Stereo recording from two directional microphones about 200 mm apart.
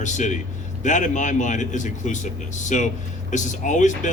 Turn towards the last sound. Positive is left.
turn(degrees=40)  # may be behind; listen again after turning